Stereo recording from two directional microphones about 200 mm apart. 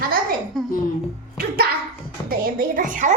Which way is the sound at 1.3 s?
50° right (ahead or behind).